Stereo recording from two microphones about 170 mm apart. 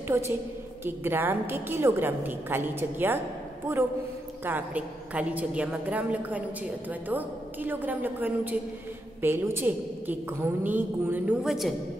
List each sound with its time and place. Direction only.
0.1 s a woman's voice: 15° right (ahead or behind)
4.5 s a woman's voice: 10° right (ahead or behind)